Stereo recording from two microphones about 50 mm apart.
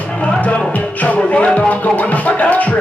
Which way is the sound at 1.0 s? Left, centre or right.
Left.